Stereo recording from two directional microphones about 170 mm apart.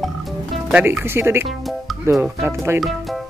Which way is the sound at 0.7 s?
10° right (ahead or behind).